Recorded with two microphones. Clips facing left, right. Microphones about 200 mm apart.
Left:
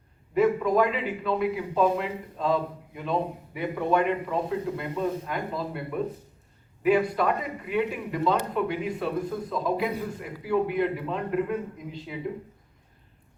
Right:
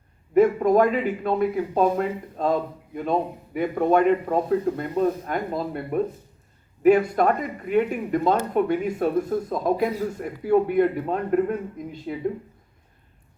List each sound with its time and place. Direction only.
0.3 s a man's voice: 45° right (ahead or behind)
6.8 s a man's voice: 45° right (ahead or behind)